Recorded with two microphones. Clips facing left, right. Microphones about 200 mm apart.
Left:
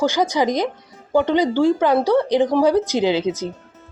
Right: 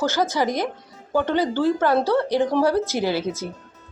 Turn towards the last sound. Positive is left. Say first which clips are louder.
# left 5 dB
turn(degrees=15)  # may be behind; listen again after turning